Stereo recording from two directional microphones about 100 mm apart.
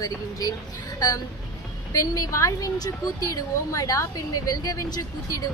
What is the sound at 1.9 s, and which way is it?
A woman's voice, 35° left (ahead or behind).